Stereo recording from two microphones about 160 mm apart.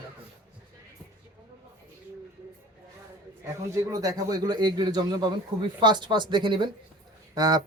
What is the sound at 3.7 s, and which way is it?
A man's voice, 20° right (ahead or behind).